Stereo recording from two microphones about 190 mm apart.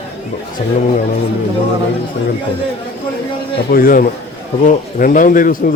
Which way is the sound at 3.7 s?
50° left (ahead or behind).